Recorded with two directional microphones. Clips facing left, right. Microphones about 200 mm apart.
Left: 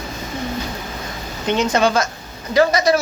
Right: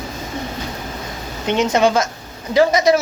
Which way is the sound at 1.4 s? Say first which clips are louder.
Right 1 dB; 20° right (ahead or behind).